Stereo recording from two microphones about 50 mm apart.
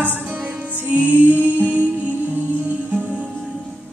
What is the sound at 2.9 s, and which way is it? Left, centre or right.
Music, right.